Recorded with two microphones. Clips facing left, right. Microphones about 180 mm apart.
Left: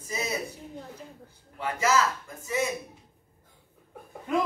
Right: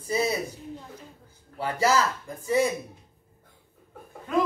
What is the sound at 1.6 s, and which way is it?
Speech, 35° right (ahead or behind).